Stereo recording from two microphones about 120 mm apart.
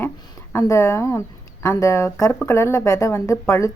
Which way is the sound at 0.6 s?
25° left (ahead or behind).